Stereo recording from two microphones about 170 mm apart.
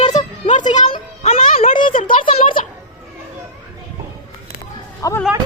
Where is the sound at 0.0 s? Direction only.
45° left (ahead or behind).